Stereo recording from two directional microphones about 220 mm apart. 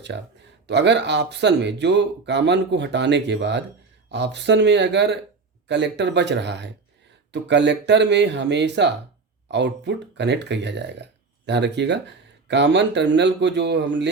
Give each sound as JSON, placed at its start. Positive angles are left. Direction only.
{"t": 0.1, "sound": "speech", "side_deg": -55}